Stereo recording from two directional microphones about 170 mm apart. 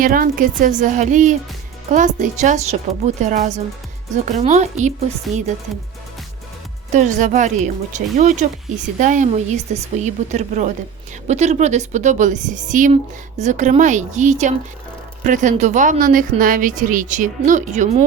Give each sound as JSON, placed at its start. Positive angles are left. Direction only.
{"t": 0.0, "sound": "a woman's voice", "side_deg": -55}
{"t": 6.9, "sound": "a woman's voice", "side_deg": -45}